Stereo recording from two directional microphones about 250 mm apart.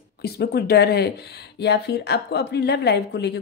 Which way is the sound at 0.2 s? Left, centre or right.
Left.